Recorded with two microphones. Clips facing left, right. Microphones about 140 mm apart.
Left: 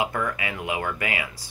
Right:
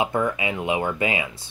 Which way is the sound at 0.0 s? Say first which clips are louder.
Right 4 dB; 20° right (ahead or behind).